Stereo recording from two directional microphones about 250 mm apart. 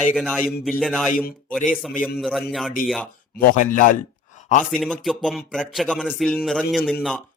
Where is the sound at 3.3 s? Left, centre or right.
Left.